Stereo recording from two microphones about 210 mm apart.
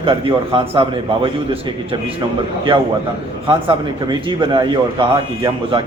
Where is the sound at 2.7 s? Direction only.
25° right (ahead or behind).